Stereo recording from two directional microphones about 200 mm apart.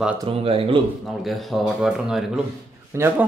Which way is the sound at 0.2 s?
30° right (ahead or behind).